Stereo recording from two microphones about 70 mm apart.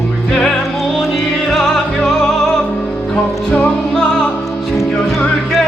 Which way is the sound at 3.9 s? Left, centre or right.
Centre.